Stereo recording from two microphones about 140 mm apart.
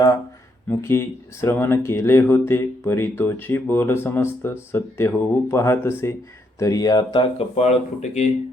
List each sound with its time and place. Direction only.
0.7 s speech: 20° left (ahead or behind); by 8.3 s 50° left (ahead or behind)